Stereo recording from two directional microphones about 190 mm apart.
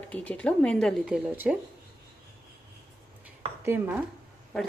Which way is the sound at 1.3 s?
10° right (ahead or behind).